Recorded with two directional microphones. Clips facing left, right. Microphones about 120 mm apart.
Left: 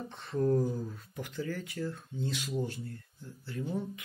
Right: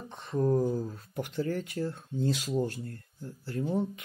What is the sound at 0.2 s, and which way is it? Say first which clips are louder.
Speech: right 2 dB; 25° right (ahead or behind).